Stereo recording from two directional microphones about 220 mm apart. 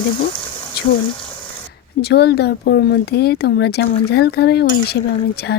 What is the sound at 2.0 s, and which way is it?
Speech, 45° left (ahead or behind).